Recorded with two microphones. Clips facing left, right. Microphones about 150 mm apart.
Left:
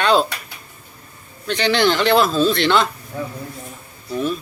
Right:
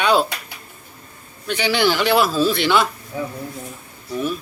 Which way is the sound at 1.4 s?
10° right (ahead or behind).